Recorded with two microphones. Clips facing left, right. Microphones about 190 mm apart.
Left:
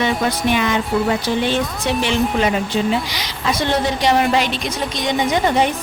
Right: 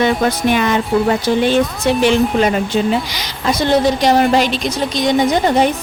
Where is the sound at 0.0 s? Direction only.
45° right (ahead or behind).